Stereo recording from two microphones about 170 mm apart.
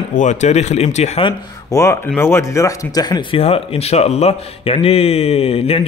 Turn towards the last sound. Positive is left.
turn(degrees=35)  # may be behind; listen again after turning